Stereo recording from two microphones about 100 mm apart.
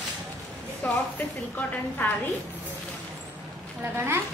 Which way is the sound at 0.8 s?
15° left (ahead or behind).